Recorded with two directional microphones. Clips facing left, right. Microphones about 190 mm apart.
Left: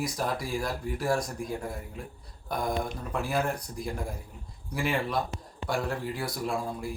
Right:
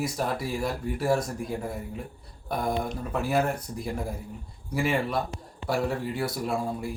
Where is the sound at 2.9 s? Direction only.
Centre (ahead or behind).